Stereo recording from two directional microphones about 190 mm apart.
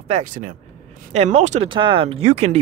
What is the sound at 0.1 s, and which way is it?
Speech, 40° right (ahead or behind).